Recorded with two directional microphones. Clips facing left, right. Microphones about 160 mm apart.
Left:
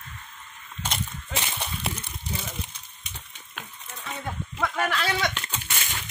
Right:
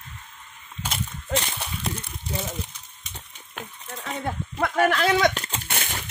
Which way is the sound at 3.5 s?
40° right (ahead or behind).